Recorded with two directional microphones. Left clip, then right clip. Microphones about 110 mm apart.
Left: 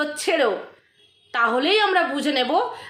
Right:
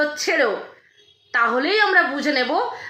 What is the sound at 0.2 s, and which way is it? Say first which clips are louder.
A woman's voice: right 1 dB; 20° left (ahead or behind).